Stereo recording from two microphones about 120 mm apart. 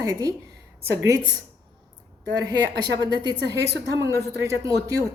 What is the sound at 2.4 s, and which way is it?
Speech, 30° right (ahead or behind).